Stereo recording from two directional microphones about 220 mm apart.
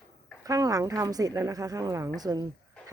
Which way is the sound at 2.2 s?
15° right (ahead or behind).